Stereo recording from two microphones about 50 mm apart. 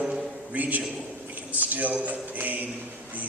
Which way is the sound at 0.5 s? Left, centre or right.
Right.